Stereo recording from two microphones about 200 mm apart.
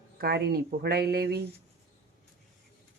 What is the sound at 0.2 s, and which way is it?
Speech, 50° right (ahead or behind).